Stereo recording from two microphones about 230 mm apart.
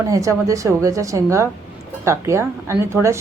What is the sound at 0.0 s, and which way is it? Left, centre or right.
A woman's voice, centre.